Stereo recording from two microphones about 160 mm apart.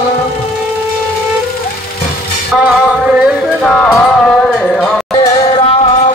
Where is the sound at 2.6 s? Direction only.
10° right (ahead or behind).